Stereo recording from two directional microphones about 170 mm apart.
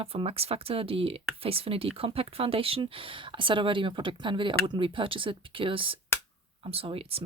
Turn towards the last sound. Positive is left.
turn(degrees=-35)  # may be behind; listen again after turning